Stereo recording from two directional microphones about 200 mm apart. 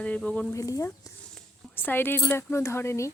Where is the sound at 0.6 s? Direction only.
15° left (ahead or behind).